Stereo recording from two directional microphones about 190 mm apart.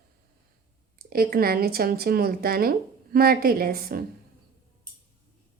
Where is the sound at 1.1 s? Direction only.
50° right (ahead or behind).